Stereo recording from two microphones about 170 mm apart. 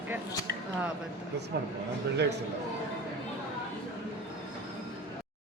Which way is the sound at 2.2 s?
85° right.